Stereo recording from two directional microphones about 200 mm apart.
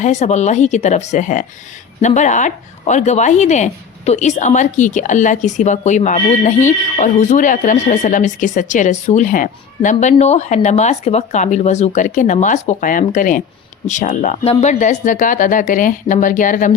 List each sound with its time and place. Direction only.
0.0 s speech: 35° left (ahead or behind)